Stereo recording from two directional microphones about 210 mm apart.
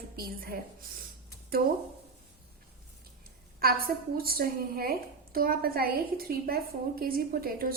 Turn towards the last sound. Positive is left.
turn(degrees=-45)  # may be behind; listen again after turning